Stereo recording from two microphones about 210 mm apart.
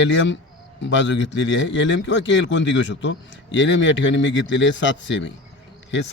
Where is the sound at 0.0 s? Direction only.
60° left (ahead or behind).